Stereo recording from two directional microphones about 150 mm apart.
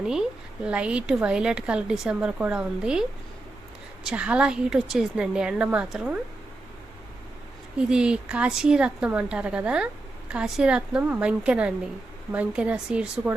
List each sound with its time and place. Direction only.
0.0 s a woman's voice: 5° right (ahead or behind)
4.0 s a woman's voice: 10° right (ahead or behind)
7.8 s a woman's voice: 5° right (ahead or behind)